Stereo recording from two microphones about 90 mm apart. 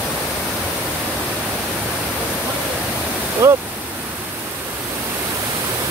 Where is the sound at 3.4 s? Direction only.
35° right (ahead or behind).